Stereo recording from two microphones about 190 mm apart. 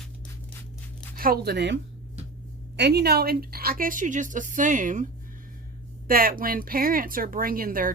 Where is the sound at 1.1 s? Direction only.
50° right (ahead or behind).